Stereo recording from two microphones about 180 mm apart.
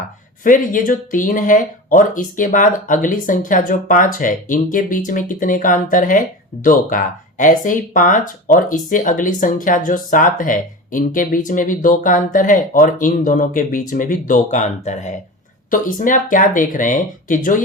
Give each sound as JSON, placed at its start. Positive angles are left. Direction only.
{"t": 0.4, "sound": "speech", "side_deg": 50}